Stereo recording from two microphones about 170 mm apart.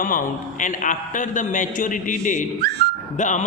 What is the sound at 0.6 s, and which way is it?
A man's voice, 50° left (ahead or behind).